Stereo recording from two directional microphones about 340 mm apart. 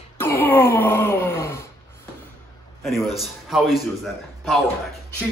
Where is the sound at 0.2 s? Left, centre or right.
Centre.